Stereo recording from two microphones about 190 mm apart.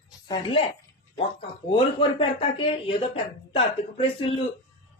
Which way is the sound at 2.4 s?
25° left (ahead or behind).